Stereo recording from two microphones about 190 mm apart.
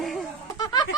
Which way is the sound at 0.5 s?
20° left (ahead or behind).